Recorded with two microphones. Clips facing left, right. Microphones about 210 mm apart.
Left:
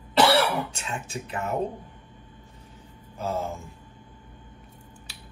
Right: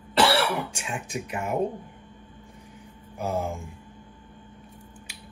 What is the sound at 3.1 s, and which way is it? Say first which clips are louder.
Speech: right 1 dB; 15° right (ahead or behind).